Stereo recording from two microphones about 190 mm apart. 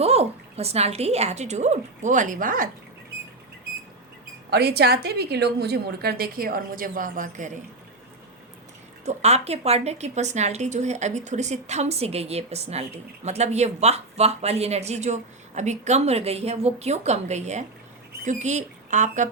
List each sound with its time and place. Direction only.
0.0 s a woman's voice: 35° right (ahead or behind)
4.5 s a woman's voice: 55° right (ahead or behind); by 7.6 s 40° right (ahead or behind)
9.0 s a woman's voice: 35° right (ahead or behind)